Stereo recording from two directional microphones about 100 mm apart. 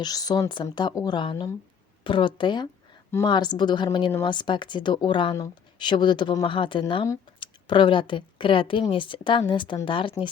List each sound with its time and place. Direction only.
0.0 s a woman's voice: 40° left (ahead or behind)
1.2 s a woman's voice: 55° left (ahead or behind)